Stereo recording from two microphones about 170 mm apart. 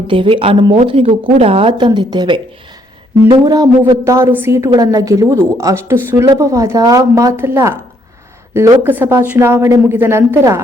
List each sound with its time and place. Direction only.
0.1 s a woman's voice: 30° right (ahead or behind); by 10.6 s 15° right (ahead or behind)